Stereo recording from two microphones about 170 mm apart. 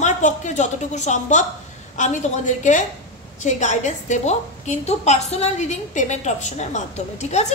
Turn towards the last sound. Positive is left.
turn(degrees=40)  # may be behind; listen again after turning